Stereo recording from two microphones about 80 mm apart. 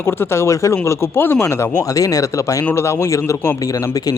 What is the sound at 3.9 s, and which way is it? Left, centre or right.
Speech, left.